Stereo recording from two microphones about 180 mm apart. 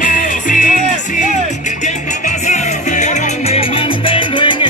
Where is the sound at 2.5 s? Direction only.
40° left (ahead or behind).